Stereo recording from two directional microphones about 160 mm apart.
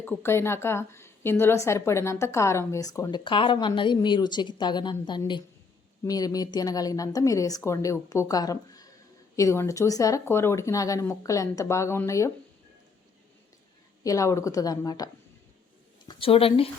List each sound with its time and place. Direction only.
0.0 s a woman's voice: 10° left (ahead or behind)
14.0 s a woman's voice: 20° left (ahead or behind)
16.0 s speech: 35° left (ahead or behind)